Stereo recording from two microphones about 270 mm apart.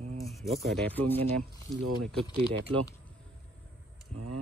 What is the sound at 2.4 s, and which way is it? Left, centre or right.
Speech, right.